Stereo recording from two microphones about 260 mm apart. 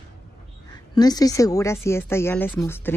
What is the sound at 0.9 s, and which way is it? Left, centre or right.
A woman's voice, centre.